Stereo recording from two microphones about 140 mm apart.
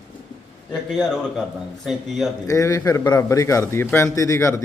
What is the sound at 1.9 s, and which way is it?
Speech, centre (ahead or behind).